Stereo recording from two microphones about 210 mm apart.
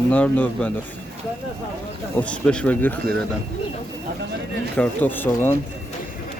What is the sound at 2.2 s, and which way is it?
Speech, 5° left (ahead or behind).